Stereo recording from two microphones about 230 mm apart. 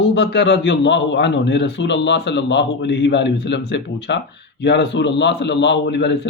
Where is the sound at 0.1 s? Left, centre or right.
Left.